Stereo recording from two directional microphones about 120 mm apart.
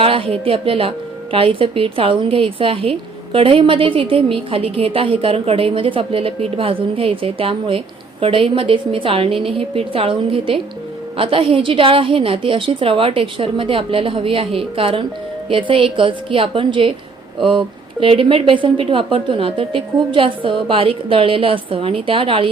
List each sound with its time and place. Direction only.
0.0 s a woman's voice: 50° right (ahead or behind)
18.0 s a woman's voice: 50° right (ahead or behind)